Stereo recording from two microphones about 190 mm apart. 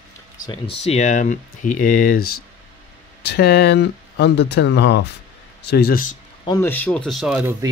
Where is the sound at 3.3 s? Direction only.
60° left (ahead or behind).